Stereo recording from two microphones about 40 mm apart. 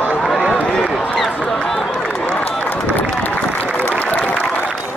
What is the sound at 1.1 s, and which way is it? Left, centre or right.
Run, centre.